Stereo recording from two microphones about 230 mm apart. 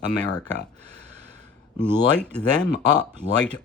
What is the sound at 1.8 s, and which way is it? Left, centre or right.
Speech, centre.